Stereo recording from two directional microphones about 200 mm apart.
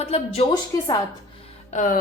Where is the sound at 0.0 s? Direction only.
30° left (ahead or behind).